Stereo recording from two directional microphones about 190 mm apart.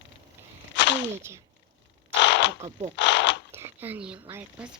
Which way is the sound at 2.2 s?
70° left (ahead or behind).